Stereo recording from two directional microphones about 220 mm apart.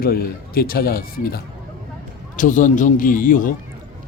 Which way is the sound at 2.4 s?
35° left (ahead or behind).